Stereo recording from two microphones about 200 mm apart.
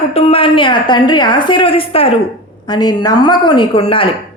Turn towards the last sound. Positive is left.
turn(degrees=25)  # may be behind; listen again after turning